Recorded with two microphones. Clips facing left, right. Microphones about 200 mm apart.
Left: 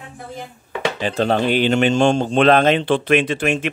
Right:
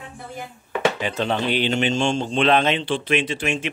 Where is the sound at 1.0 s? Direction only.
35° left (ahead or behind).